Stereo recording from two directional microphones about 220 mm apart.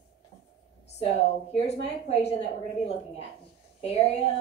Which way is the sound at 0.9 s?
30° left (ahead or behind).